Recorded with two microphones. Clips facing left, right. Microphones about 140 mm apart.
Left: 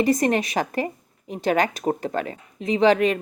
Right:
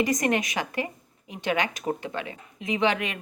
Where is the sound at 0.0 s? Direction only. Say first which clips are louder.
Left 4 dB; 35° left (ahead or behind).